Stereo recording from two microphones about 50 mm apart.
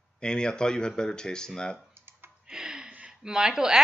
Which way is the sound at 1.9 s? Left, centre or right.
Right.